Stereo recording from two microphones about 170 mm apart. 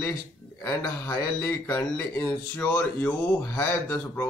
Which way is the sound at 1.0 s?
15° left (ahead or behind).